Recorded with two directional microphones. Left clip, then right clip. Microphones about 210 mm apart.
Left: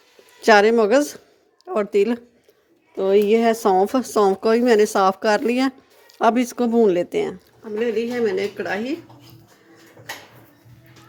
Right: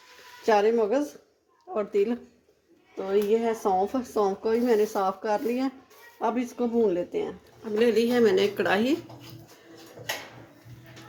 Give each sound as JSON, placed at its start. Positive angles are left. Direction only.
{"t": 0.4, "sound": "speech", "side_deg": 40}
{"t": 2.9, "sound": "speech", "side_deg": 50}
{"t": 7.6, "sound": "speech", "side_deg": 15}